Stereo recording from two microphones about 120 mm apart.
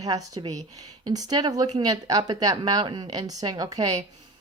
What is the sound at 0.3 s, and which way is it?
Speech, 30° right (ahead or behind).